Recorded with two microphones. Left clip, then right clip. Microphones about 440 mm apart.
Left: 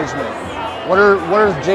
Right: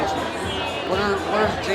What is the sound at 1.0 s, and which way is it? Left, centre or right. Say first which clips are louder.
Speech: left 10 dB; left.